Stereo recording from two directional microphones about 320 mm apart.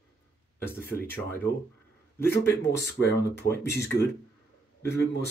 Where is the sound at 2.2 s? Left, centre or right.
Centre.